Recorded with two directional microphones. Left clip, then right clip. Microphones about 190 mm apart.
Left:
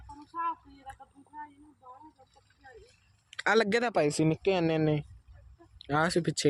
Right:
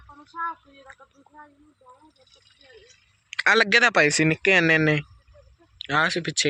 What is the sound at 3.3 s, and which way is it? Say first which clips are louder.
Speech: right 8 dB; 15° left (ahead or behind).